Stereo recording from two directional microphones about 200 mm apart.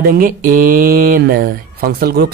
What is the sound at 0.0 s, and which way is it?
Speech, 45° right (ahead or behind).